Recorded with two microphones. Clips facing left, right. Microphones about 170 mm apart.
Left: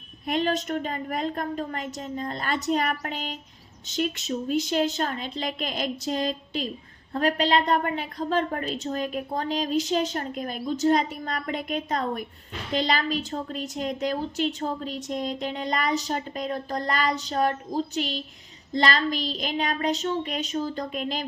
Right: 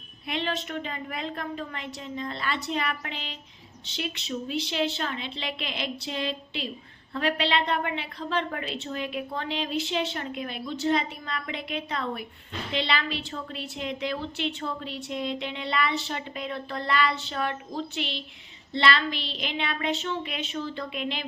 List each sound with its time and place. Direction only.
0.3 s a woman's voice: 45° left (ahead or behind)